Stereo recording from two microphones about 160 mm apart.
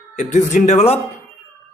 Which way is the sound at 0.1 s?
50° left (ahead or behind).